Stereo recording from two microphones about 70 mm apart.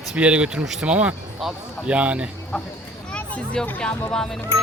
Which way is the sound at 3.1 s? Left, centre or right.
Centre.